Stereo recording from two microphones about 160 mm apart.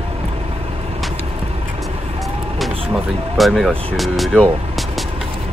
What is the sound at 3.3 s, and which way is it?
Speech, centre (ahead or behind).